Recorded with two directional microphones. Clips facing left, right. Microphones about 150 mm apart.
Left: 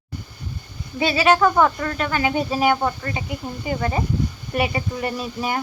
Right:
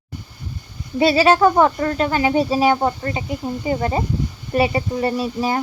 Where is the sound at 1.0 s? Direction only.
35° right (ahead or behind).